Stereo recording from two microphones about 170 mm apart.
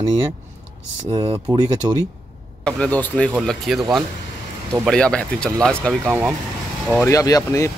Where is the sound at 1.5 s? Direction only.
25° right (ahead or behind).